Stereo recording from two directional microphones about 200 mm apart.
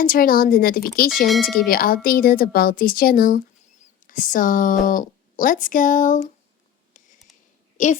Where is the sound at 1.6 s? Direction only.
45° left (ahead or behind).